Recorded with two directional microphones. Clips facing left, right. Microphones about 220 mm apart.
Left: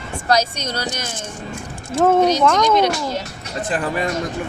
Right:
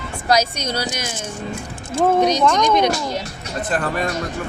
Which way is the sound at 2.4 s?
5° left (ahead or behind).